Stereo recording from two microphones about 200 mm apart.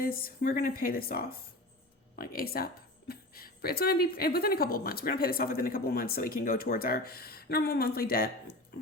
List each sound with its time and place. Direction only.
0.0 s a woman's voice: 45° left (ahead or behind)